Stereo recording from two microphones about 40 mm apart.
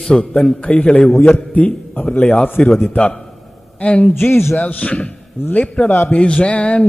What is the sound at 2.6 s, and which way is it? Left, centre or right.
A man's voice, left.